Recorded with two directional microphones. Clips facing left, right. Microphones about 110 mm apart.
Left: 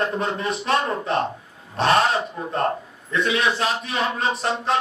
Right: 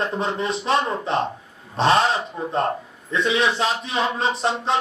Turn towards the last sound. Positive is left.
turn(degrees=-25)  # may be behind; listen again after turning